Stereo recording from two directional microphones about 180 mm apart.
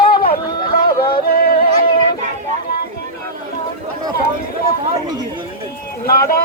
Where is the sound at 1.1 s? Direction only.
55° left (ahead or behind).